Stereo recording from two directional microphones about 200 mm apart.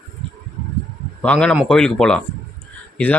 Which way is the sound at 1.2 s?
5° left (ahead or behind).